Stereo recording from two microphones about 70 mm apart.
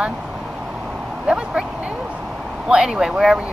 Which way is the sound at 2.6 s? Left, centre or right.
Centre.